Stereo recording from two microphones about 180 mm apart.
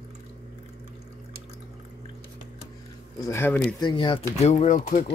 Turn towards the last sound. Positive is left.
turn(degrees=45)  # may be behind; listen again after turning